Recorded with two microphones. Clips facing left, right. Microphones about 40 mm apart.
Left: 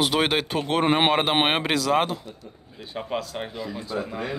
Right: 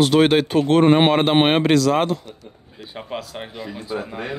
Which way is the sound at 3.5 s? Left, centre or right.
Right.